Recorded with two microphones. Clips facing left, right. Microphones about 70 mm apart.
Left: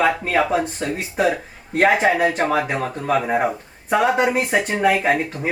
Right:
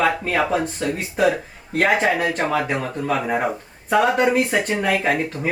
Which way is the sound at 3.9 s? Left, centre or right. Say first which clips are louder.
Right 1 dB; centre.